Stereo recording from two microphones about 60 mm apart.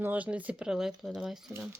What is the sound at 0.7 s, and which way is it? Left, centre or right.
Speech, centre.